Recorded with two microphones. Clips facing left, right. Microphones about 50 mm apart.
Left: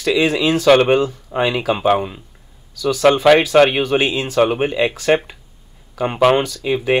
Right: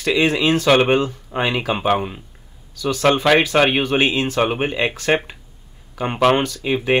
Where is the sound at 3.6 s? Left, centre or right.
Centre.